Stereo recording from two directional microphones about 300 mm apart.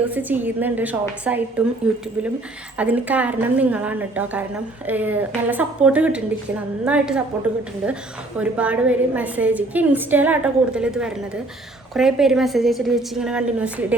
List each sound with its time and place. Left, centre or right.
0.0 s a woman's voice: centre
8.4 s a woman's voice: centre